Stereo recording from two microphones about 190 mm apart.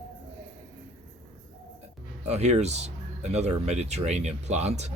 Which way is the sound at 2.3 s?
35° right (ahead or behind).